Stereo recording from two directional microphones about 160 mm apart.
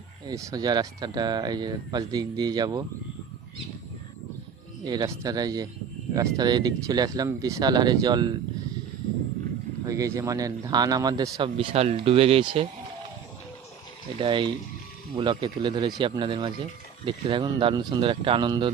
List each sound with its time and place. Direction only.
0.3 s speech: 20° right (ahead or behind)
4.8 s speech: 25° right (ahead or behind)
9.8 s speech: 20° right (ahead or behind)
14.2 s speech: 30° right (ahead or behind)